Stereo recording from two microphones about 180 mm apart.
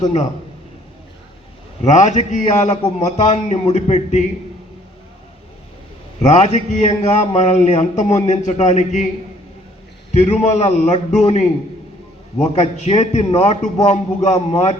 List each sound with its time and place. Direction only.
1.8 s speech: 40° left (ahead or behind)
6.2 s speech: 40° left (ahead or behind)
10.2 s speech: 40° left (ahead or behind)